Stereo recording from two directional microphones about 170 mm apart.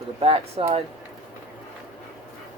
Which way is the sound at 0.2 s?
35° right (ahead or behind).